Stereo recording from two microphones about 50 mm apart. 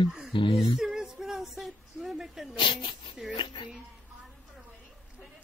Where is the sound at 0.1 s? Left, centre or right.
Centre.